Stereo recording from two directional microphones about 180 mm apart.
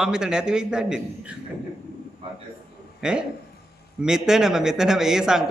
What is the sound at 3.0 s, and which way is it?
A man's voice, 5° right (ahead or behind).